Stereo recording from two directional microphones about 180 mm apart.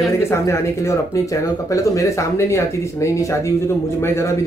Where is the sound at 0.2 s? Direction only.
15° left (ahead or behind).